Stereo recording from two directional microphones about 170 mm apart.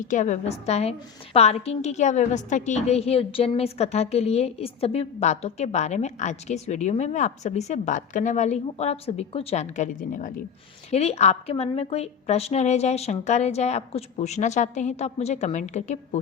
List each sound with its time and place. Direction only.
0.0 s a woman's voice: 45° left (ahead or behind)
10.9 s a woman's voice: 40° left (ahead or behind)